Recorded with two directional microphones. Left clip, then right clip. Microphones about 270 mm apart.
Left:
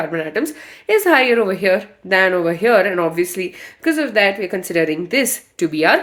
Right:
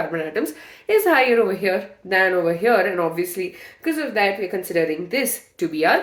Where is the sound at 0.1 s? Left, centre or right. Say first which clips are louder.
Left 3 dB; left.